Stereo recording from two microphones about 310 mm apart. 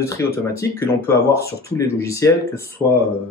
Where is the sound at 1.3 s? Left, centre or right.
Left.